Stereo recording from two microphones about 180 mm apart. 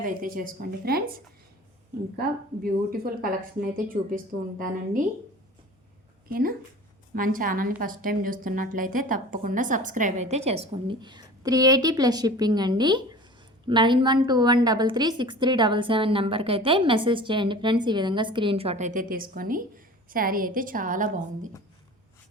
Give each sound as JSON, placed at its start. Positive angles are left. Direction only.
{"t": 0.0, "sound": "a woman's voice", "side_deg": -50}
{"t": 6.2, "sound": "a woman's voice", "side_deg": -55}